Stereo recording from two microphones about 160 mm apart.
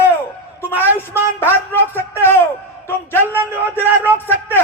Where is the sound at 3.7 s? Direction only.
15° left (ahead or behind).